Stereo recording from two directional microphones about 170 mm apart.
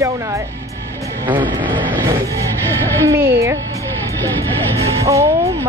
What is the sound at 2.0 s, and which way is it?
Music, 20° right (ahead or behind).